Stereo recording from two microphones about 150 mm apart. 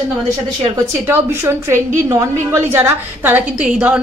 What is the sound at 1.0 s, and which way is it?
A woman's voice, 15° right (ahead or behind).